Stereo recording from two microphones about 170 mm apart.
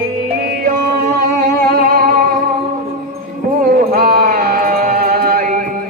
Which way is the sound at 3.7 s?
60° right (ahead or behind).